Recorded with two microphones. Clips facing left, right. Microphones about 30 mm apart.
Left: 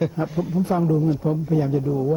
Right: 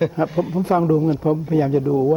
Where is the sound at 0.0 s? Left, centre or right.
Right.